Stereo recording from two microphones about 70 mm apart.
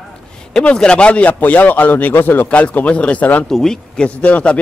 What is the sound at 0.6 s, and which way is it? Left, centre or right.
A man's voice, centre.